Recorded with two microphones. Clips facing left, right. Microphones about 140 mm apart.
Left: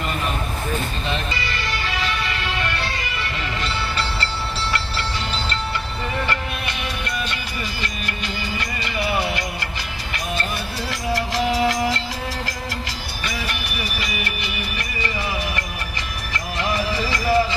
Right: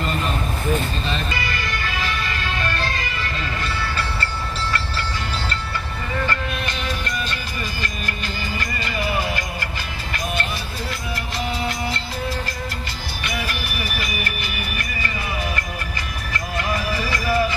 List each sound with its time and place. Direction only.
1.0 s music: 20° left (ahead or behind)
6.2 s music: 15° left (ahead or behind)
8.5 s music: 20° left (ahead or behind)
10.9 s music: 90° left
13.5 s music: 25° left (ahead or behind)
16.5 s music: 25° left (ahead or behind)